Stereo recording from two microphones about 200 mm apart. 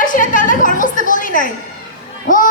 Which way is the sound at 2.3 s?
40° left (ahead or behind).